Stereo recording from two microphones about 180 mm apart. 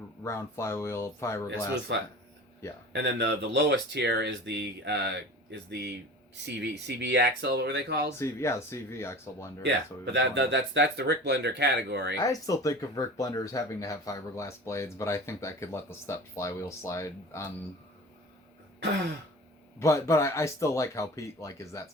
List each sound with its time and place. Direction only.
0.2 s speech: 15° left (ahead or behind)
2.9 s speech: 70° right (ahead or behind)
8.2 s speech: 15° left (ahead or behind)
9.6 s speech: 70° right (ahead or behind)
12.2 s speech: 20° left (ahead or behind)
19.8 s speech: 15° left (ahead or behind)